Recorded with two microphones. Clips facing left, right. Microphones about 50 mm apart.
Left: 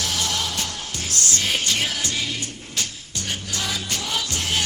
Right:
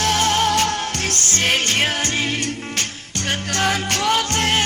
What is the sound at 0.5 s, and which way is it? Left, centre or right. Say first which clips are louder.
Music: right 10 dB; right.